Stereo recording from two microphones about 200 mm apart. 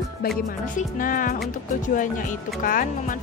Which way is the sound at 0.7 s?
45° left (ahead or behind).